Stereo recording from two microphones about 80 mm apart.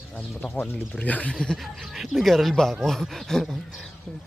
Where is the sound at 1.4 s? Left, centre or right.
Centre.